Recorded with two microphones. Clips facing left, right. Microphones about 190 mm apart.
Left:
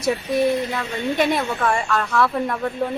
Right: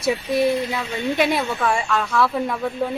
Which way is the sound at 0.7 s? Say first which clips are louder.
Even; 5° right (ahead or behind).